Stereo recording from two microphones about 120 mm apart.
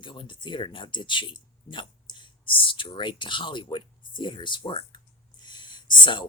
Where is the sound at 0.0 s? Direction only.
45° left (ahead or behind).